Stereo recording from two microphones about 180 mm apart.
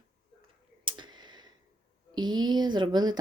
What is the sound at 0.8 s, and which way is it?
Computer keyboard, 25° right (ahead or behind).